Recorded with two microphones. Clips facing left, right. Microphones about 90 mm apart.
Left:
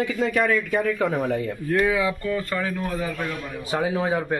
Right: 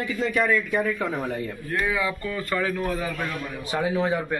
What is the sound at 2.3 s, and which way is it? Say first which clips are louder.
Speech: even; 30° left (ahead or behind).